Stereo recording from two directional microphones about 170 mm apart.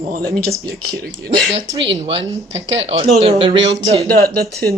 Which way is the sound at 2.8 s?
35° right (ahead or behind).